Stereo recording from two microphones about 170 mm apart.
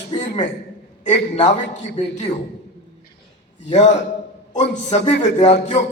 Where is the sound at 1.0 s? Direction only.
45° left (ahead or behind).